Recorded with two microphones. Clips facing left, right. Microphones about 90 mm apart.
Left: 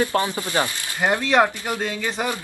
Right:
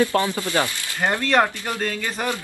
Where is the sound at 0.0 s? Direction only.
20° left (ahead or behind).